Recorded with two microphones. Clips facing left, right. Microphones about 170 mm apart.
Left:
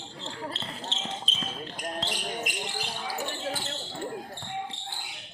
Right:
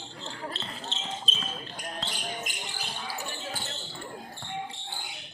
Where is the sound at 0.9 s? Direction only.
90° left.